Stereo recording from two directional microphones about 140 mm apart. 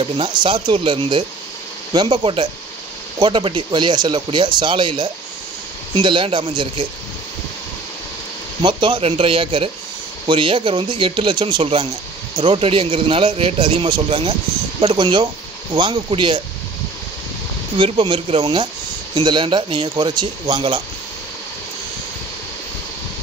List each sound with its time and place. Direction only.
0.0 s speech: 35° right (ahead or behind)
8.6 s speech: 35° right (ahead or behind)
17.7 s speech: 35° right (ahead or behind)